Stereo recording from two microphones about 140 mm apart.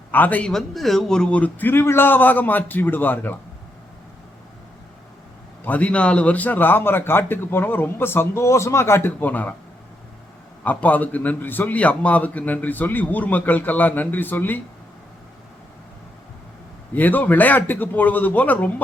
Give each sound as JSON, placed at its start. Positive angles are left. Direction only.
{"t": 0.1, "sound": "a man's voice", "side_deg": 10}
{"t": 5.6, "sound": "a man's voice", "side_deg": 10}
{"t": 10.6, "sound": "a man's voice", "side_deg": 10}
{"t": 16.9, "sound": "a man's voice", "side_deg": 10}